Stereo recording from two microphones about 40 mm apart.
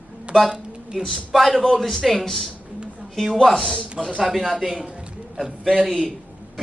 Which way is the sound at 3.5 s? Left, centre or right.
Centre.